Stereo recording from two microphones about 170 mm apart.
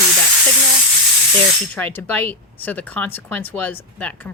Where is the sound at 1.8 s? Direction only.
10° left (ahead or behind).